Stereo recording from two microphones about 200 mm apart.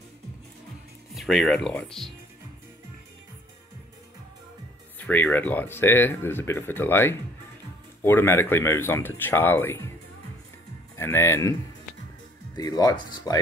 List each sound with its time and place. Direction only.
1.1 s speech: centre (ahead or behind)
4.9 s speech: 10° left (ahead or behind)
11.0 s speech: 10° left (ahead or behind)
12.5 s speech: 20° left (ahead or behind)